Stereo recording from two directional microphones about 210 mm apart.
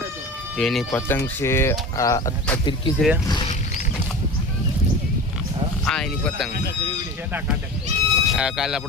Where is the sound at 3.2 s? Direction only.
20° left (ahead or behind).